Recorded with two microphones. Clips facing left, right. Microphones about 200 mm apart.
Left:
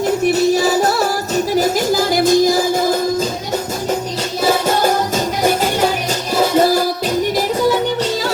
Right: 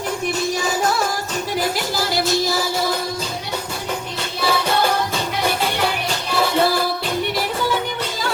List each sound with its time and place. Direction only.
0.3 s music: 40° left (ahead or behind)
4.4 s music: 45° left (ahead or behind)